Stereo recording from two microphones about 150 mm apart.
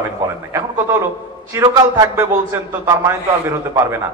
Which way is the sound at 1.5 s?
20° right (ahead or behind).